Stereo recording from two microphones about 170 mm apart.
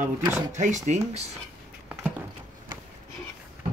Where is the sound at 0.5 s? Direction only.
45° right (ahead or behind).